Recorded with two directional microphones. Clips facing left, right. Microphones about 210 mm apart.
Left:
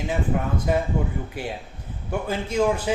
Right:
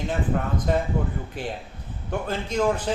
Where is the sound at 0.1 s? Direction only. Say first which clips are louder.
Left 2 dB; 10° left (ahead or behind).